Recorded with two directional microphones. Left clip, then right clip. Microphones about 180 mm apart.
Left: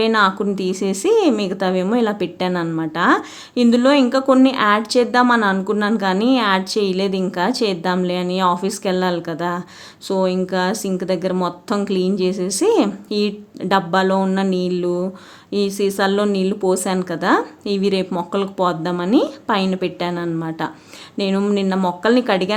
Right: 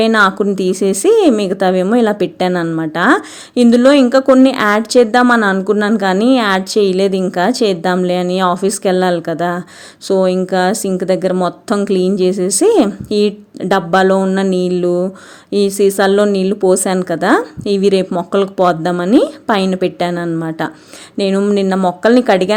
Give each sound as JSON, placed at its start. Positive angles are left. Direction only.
{"t": 0.0, "sound": "a woman's voice", "side_deg": -30}